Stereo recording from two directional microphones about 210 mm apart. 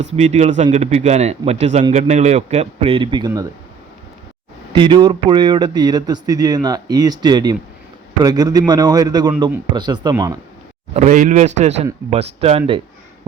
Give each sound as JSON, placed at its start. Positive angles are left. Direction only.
{"t": 0.0, "sound": "a man's voice", "side_deg": -30}
{"t": 4.7, "sound": "speech", "side_deg": -20}
{"t": 10.9, "sound": "a man's voice", "side_deg": -35}